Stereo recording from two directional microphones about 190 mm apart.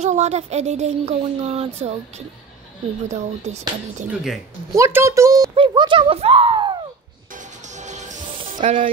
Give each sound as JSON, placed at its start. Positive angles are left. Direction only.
{"t": 0.0, "sound": "speech", "side_deg": -35}
{"t": 4.1, "sound": "speech", "side_deg": 0}
{"t": 4.7, "sound": "speech", "side_deg": -15}
{"t": 7.7, "sound": "music", "side_deg": -40}